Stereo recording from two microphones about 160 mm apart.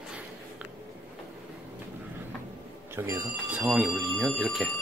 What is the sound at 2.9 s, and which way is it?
Speech, 15° right (ahead or behind).